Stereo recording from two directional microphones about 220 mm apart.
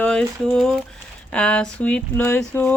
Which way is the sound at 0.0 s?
5° left (ahead or behind).